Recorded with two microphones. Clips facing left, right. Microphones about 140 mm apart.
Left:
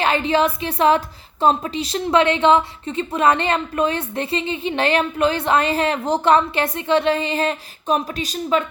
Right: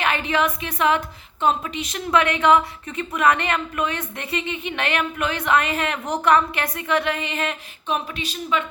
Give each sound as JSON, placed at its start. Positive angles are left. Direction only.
{"t": 0.0, "sound": "a woman's voice", "side_deg": 30}